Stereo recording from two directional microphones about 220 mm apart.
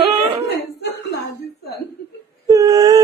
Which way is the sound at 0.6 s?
50° left (ahead or behind).